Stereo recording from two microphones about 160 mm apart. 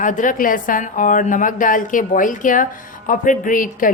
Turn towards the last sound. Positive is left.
turn(degrees=55)  # may be behind; listen again after turning